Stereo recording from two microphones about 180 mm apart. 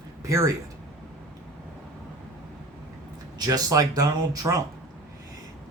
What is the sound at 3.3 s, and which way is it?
Speech, 20° right (ahead or behind).